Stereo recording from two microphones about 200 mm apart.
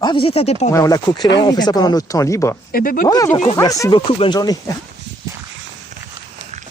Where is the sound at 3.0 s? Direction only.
15° left (ahead or behind).